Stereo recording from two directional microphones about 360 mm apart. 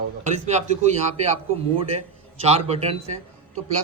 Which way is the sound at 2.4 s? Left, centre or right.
Centre.